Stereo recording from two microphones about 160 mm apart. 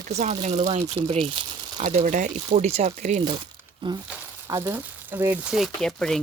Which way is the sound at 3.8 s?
30° right (ahead or behind).